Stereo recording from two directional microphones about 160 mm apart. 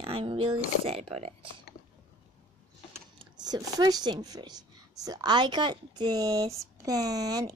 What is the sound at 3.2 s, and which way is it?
Speech, 25° right (ahead or behind).